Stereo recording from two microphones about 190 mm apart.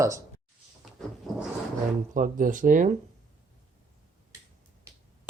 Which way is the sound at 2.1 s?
45° right (ahead or behind).